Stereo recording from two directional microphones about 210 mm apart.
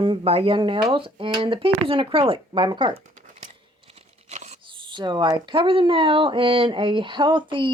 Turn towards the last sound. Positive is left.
turn(degrees=-25)  # may be behind; listen again after turning